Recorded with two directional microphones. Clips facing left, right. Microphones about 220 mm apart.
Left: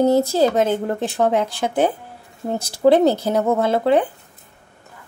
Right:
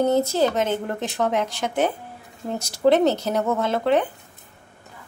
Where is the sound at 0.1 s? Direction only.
35° left (ahead or behind).